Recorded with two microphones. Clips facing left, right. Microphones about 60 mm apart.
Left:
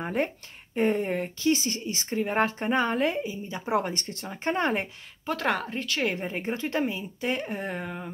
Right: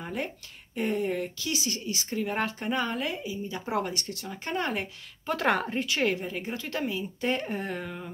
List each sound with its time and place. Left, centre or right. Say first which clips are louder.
0.0 s speech: left 6 dB; left
3.9 s a woman's voice: left 1 dB; left
5.3 s speech: right 1 dB; centre
6.1 s a woman's voice: left 3 dB; left
7.2 s speech: right 1 dB; centre